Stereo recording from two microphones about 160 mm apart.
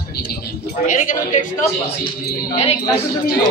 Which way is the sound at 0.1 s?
75° left (ahead or behind).